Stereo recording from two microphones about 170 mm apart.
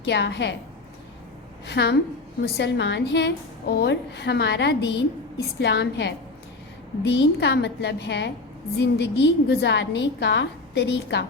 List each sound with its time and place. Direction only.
0.0 s a woman's voice: 90° left
1.6 s a woman's voice: 85° left
7.2 s a woman's voice: 85° left
8.8 s a woman's voice: 75° left (ahead or behind)